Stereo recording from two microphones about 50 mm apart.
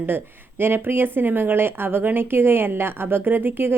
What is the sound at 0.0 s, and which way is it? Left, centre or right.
Speech, right.